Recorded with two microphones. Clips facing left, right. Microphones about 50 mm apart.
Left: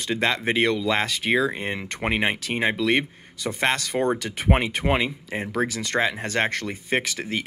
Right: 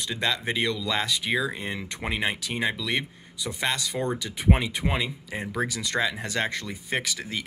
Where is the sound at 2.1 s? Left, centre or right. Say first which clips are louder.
Left 4 dB; left.